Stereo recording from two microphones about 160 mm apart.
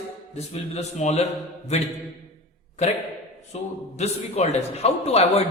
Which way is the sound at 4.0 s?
45° left (ahead or behind).